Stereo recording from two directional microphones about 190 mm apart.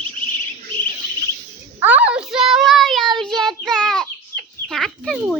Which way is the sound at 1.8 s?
5° right (ahead or behind).